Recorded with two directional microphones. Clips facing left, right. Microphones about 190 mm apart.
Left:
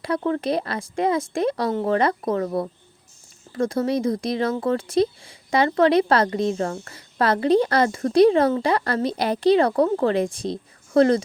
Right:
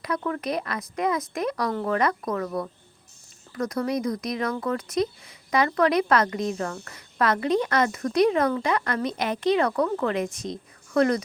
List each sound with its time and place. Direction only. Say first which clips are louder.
0.0 s speech: left 5 dB; 30° left (ahead or behind)